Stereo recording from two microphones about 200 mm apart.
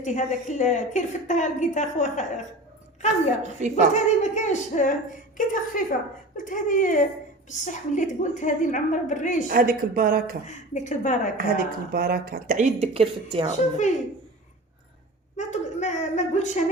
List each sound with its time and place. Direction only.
0.0 s a woman's voice: 35° left (ahead or behind)
3.4 s a woman's voice: 35° right (ahead or behind)
3.9 s a woman's voice: 35° left (ahead or behind)
9.5 s speech: 45° right (ahead or behind)
10.4 s a woman's voice: 35° left (ahead or behind)
11.3 s speech: 45° right (ahead or behind); by 13.5 s 30° right (ahead or behind)
13.5 s a woman's voice: 35° left (ahead or behind)
15.4 s a woman's voice: 35° left (ahead or behind)